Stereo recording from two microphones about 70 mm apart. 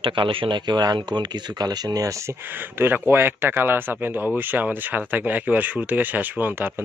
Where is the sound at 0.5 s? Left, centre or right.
Right.